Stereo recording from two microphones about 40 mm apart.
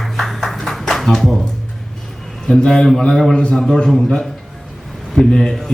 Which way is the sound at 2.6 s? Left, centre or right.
Centre.